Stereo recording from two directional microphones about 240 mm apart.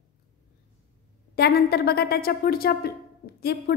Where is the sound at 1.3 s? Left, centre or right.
Left.